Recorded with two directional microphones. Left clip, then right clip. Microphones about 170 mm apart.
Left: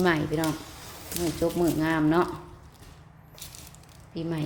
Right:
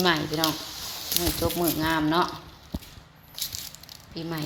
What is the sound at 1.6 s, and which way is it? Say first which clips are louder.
Speech: even; 20° left (ahead or behind).